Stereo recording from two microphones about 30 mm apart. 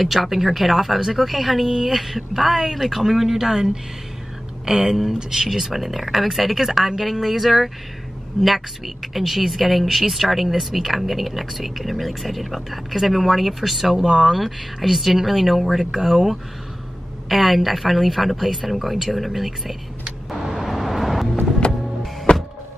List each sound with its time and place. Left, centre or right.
0.0 s speech: centre
13.9 s speech: right
14.3 s speech: centre
17.3 s speech: centre
20.4 s vehicle: centre
21.6 s music: left
22.3 s power windows: left